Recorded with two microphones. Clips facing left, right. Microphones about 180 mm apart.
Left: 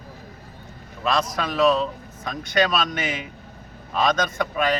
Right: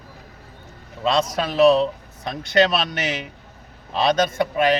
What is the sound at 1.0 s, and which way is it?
A man's voice, 25° right (ahead or behind).